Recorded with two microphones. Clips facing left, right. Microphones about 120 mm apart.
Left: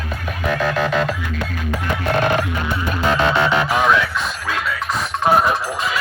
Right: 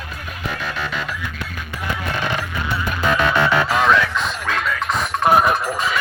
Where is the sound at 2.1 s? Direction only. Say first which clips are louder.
Left 8 dB; 50° left (ahead or behind).